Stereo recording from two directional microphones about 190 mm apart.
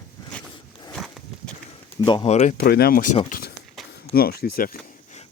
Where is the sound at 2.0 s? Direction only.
30° left (ahead or behind).